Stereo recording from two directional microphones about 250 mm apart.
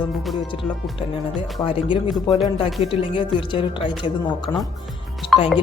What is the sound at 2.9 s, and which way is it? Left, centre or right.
A woman's voice, centre.